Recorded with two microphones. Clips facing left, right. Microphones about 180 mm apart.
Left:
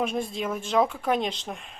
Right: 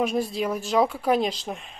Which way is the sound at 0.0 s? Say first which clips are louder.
Right 3 dB; 5° right (ahead or behind).